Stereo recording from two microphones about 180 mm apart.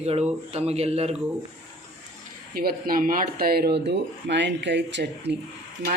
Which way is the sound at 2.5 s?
55° right (ahead or behind).